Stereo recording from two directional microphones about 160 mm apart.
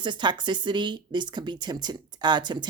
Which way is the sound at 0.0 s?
30° right (ahead or behind).